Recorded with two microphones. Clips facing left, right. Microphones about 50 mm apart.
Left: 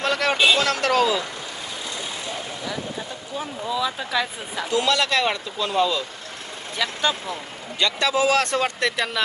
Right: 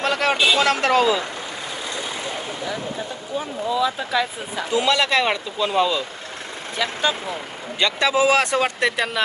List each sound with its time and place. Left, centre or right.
0.0 s a sound: centre
0.6 s speech: right
3.3 s speech: centre
4.7 s a man's voice: centre
7.8 s a man's voice: right